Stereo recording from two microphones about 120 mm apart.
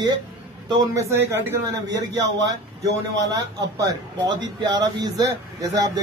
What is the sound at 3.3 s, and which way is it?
Speech, 35° right (ahead or behind).